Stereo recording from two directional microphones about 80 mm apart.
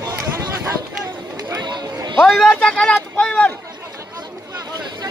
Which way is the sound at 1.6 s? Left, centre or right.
Right.